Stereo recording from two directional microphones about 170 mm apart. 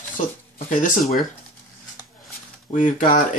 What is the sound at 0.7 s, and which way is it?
Speech, 50° left (ahead or behind).